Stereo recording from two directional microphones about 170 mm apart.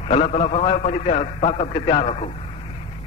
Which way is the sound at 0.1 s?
40° left (ahead or behind).